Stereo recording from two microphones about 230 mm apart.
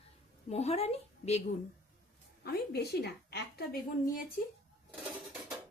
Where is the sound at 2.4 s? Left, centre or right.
Left.